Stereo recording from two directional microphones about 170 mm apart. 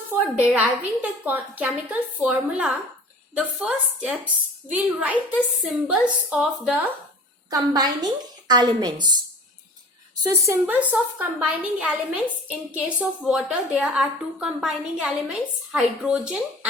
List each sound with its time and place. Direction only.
0.1 s a woman's voice: 10° right (ahead or behind)
7.5 s a woman's voice: 25° right (ahead or behind)
10.2 s a woman's voice: 15° right (ahead or behind)